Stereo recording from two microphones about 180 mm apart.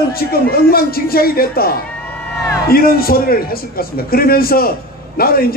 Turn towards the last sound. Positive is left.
turn(degrees=55)  # may be behind; listen again after turning